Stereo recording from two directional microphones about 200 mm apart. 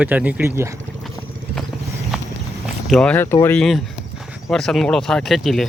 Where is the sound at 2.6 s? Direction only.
Centre (ahead or behind).